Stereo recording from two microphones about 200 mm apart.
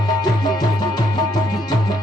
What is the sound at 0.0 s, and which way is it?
Music, 20° left (ahead or behind).